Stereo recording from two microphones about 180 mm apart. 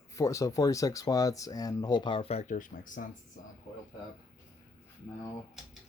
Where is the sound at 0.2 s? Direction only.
15° left (ahead or behind); by 3.1 s 45° left (ahead or behind).